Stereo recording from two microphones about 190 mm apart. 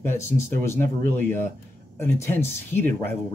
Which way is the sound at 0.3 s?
50° right (ahead or behind).